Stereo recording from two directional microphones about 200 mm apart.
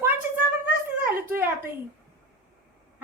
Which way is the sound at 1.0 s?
10° right (ahead or behind).